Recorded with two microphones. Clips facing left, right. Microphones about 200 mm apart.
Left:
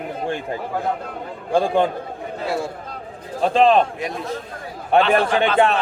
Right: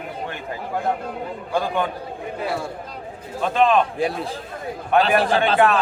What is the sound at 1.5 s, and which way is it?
Speech, 30° left (ahead or behind).